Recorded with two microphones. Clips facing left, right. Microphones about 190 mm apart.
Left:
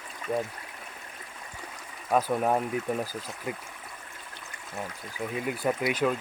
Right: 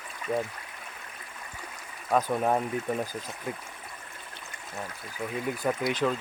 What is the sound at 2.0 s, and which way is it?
Speech, 5° left (ahead or behind).